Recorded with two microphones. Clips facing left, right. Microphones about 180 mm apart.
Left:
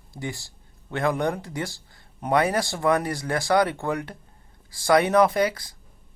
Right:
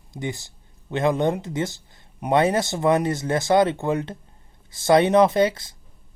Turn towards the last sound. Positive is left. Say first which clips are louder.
# right 3 dB
turn(degrees=-25)  # may be behind; listen again after turning